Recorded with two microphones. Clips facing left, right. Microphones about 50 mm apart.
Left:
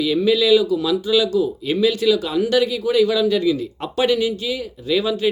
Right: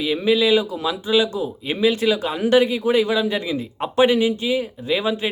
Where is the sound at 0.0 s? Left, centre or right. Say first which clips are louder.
Left 1 dB; right.